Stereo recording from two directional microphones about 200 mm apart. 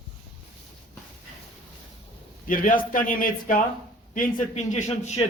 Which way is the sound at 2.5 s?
40° left (ahead or behind).